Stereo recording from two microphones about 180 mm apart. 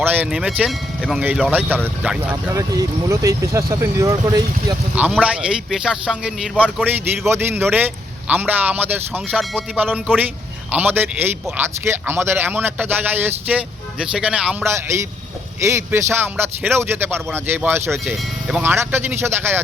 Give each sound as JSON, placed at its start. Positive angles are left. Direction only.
{"t": 0.0, "sound": "speech", "side_deg": -10}
{"t": 4.9, "sound": "speech", "side_deg": -5}
{"t": 17.9, "sound": "speech", "side_deg": 0}